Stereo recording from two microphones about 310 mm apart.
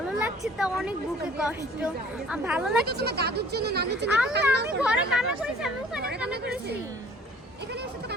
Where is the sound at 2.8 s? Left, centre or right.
Right.